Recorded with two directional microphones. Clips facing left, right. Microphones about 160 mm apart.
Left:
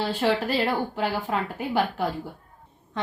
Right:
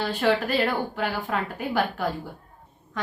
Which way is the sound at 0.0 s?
30° left (ahead or behind).